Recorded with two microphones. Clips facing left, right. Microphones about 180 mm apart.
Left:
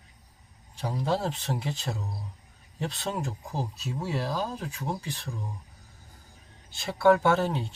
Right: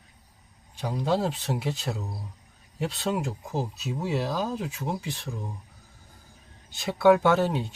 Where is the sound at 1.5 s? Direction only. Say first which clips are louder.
Right 3 dB; 5° right (ahead or behind).